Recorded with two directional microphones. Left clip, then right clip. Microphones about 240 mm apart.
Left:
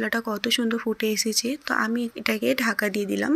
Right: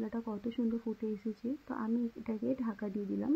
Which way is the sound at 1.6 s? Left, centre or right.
Left.